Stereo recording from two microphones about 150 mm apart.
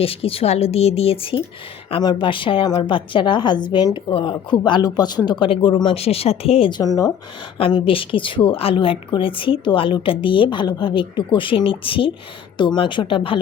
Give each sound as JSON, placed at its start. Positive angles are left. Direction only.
{"t": 0.0, "sound": "a woman's voice", "side_deg": 40}
{"t": 7.6, "sound": "a woman's voice", "side_deg": 35}